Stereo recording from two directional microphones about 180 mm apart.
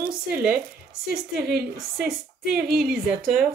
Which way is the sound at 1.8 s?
Centre (ahead or behind).